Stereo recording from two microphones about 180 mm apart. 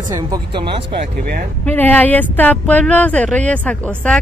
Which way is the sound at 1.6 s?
10° left (ahead or behind).